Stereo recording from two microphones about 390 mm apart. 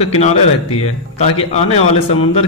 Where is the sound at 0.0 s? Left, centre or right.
Centre.